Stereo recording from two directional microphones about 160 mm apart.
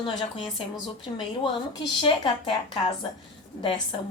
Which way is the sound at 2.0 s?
30° left (ahead or behind).